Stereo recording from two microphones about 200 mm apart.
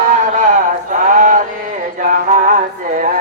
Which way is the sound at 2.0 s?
40° right (ahead or behind).